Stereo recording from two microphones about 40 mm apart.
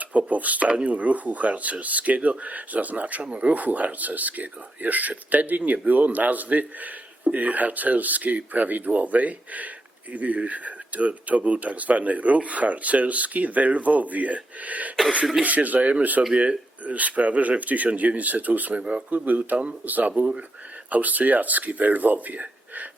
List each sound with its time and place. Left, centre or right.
0.0 s speech: right
19.2 s speech: right